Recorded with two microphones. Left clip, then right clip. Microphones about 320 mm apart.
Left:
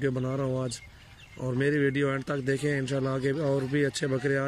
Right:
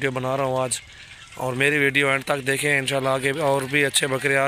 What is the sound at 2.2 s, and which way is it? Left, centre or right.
Speech, right.